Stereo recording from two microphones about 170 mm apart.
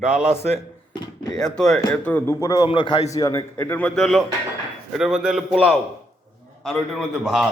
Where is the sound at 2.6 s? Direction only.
30° left (ahead or behind); by 7.5 s centre (ahead or behind).